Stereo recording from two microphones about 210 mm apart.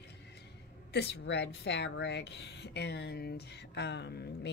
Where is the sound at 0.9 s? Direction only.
50° left (ahead or behind).